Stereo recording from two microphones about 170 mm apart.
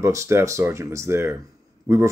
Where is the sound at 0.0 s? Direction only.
15° right (ahead or behind).